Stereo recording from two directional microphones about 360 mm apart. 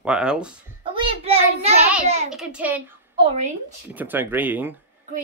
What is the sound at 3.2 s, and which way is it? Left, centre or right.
Speech, centre.